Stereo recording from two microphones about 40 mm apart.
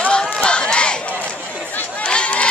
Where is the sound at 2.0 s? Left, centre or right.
Left.